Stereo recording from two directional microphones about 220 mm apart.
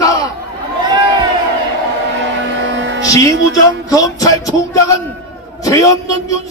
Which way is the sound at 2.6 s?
55° right (ahead or behind).